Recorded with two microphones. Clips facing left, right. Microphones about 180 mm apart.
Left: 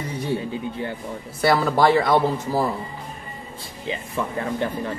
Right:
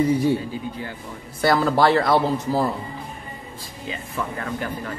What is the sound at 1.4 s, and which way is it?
Speech, 5° left (ahead or behind).